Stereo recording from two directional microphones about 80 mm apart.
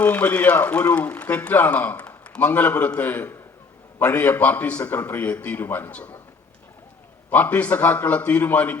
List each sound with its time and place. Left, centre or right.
0.0 s a man's voice: left
7.3 s a man's voice: left